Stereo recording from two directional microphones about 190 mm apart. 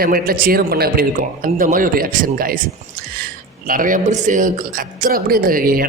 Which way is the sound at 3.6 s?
45° right (ahead or behind).